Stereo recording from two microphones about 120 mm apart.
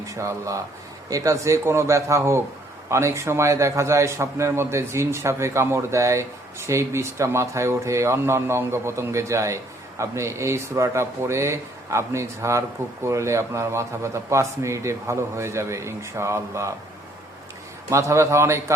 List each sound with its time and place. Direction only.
0.0 s speech: 25° right (ahead or behind)
17.8 s speech: 25° right (ahead or behind)